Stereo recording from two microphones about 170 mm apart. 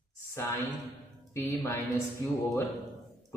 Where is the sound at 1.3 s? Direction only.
15° left (ahead or behind).